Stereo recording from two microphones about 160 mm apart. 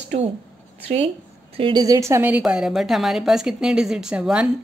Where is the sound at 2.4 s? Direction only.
5° right (ahead or behind).